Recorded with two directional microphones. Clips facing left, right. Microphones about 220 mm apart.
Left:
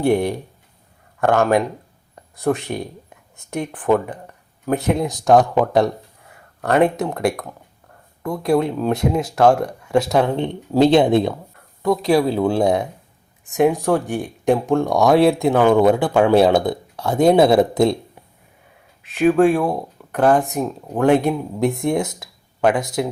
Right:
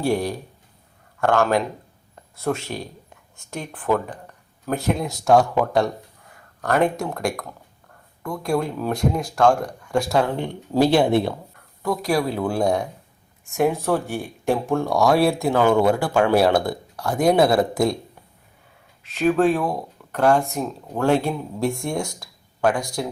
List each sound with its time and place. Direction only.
0.0 s speech: 20° left (ahead or behind)
8.4 s speech: 20° left (ahead or behind)
19.3 s speech: 15° left (ahead or behind)